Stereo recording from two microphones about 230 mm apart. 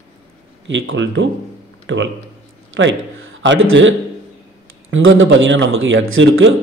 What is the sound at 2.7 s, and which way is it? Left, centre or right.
A man's voice, right.